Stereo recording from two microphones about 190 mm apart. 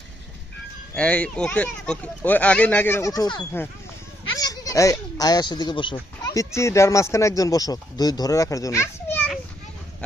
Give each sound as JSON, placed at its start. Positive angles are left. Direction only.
{"t": 0.9, "sound": "speech", "side_deg": 5}